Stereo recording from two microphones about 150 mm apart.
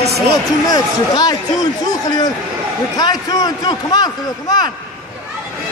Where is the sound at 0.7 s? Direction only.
25° left (ahead or behind).